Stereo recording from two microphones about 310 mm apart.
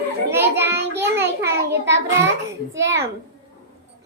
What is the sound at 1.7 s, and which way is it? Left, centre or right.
Speech, right.